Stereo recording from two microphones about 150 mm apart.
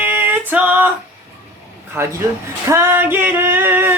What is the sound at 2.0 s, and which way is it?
Speech, 15° right (ahead or behind).